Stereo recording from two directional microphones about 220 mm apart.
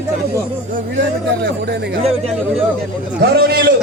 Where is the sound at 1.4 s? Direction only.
50° right (ahead or behind).